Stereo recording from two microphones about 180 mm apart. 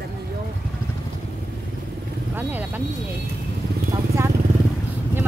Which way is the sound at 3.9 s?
15° right (ahead or behind).